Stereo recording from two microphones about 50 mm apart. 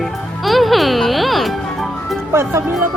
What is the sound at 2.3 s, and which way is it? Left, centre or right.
Speech, right.